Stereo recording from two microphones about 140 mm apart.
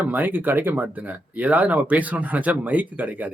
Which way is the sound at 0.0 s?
10° right (ahead or behind).